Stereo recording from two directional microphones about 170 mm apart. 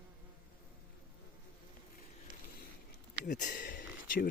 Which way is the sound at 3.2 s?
50° left (ahead or behind).